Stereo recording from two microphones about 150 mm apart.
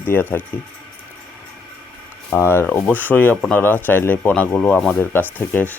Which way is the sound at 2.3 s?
15° left (ahead or behind).